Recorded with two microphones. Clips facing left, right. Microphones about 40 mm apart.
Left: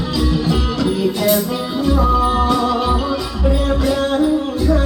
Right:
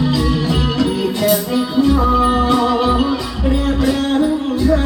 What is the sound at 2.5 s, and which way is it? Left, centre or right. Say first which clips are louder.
Music: right 2 dB; right.